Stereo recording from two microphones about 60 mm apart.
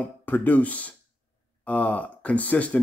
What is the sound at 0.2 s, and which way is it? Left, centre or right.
Speech, left.